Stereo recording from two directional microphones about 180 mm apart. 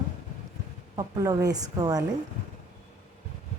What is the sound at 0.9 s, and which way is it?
A woman's voice, 20° right (ahead or behind).